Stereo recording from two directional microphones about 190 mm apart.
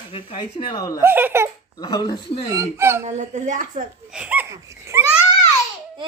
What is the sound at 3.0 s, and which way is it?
Speech, 40° right (ahead or behind).